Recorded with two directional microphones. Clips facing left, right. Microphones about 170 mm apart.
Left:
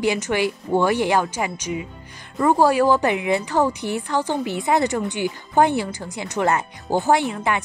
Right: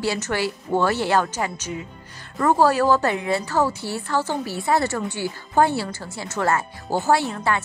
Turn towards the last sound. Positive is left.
turn(degrees=15)  # may be behind; listen again after turning